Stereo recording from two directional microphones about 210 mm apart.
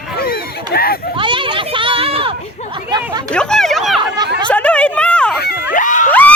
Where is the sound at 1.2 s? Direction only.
25° right (ahead or behind).